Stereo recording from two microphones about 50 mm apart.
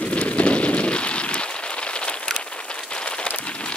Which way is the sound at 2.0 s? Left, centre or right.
Centre.